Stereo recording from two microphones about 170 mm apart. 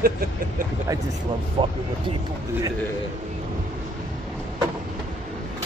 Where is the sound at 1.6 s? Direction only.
30° right (ahead or behind).